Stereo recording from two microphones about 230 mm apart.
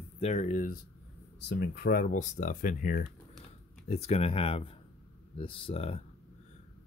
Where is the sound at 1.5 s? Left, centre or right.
Left.